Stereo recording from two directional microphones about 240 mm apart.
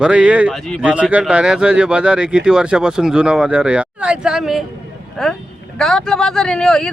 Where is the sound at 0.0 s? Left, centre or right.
Centre.